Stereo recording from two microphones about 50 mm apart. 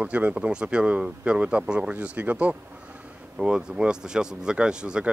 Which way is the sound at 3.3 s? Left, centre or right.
Centre.